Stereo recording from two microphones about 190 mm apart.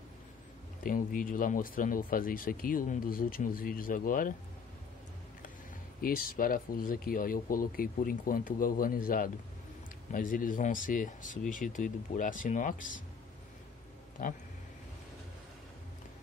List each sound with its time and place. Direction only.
0.8 s speech: 45° left (ahead or behind)
5.9 s speech: 50° left (ahead or behind)